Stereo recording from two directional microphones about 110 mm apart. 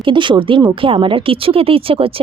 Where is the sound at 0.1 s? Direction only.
45° right (ahead or behind).